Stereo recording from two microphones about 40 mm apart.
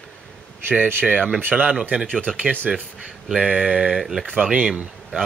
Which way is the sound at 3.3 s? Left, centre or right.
Right.